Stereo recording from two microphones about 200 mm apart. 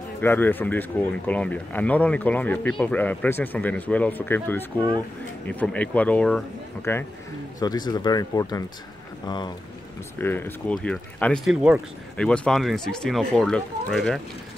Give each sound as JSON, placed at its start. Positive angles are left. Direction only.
{"t": 0.2, "sound": "speech", "side_deg": 10}
{"t": 10.1, "sound": "speech", "side_deg": 10}